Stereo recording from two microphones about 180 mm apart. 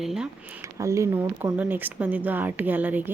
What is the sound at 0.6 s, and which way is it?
Speech, 15° right (ahead or behind).